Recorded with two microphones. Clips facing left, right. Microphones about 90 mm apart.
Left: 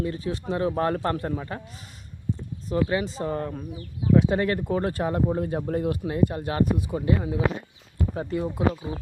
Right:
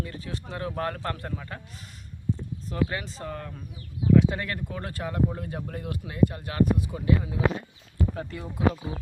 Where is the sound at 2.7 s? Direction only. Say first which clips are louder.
Left 5 dB; 15° left (ahead or behind).